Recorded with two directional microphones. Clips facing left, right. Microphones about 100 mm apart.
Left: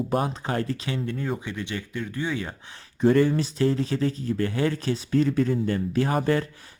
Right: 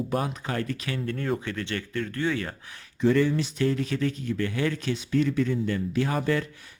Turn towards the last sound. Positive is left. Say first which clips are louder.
# left 3 dB
turn(degrees=35)  # may be behind; listen again after turning